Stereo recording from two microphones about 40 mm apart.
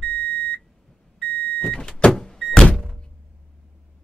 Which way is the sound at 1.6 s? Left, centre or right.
Centre.